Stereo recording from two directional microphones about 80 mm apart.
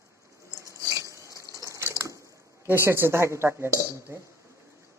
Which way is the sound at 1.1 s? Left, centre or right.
Right.